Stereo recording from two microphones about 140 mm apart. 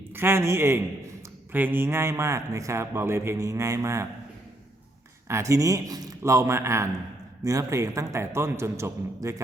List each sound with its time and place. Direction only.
0.1 s a man's voice: 15° right (ahead or behind)
5.3 s speech: 20° right (ahead or behind)